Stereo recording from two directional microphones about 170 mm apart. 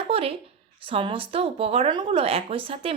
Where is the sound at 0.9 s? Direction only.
30° right (ahead or behind).